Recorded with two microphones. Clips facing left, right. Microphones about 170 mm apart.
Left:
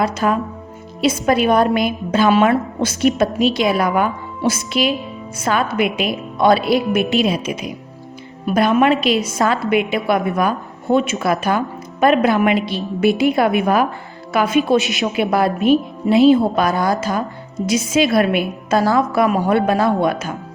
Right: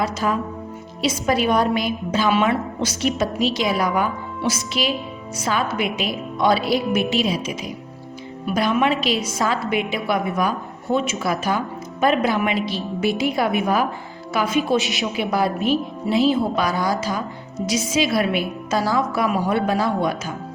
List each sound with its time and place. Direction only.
0.0 s a woman's voice: 60° left (ahead or behind)